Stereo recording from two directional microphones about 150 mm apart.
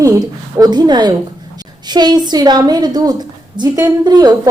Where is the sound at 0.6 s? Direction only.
30° right (ahead or behind).